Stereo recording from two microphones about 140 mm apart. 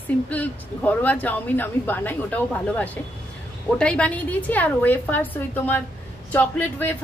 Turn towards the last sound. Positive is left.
turn(degrees=10)  # may be behind; listen again after turning